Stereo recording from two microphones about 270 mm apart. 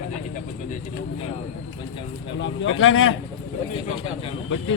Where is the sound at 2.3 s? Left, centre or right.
Left.